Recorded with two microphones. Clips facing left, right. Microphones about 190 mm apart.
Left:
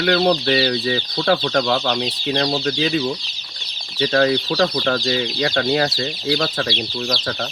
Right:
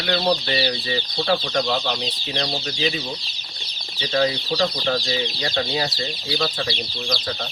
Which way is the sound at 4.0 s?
60° left (ahead or behind).